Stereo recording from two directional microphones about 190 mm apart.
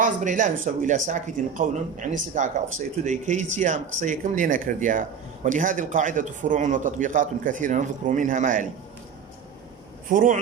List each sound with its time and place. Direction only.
0.0 s speech: 40° right (ahead or behind)
10.1 s speech: 45° right (ahead or behind)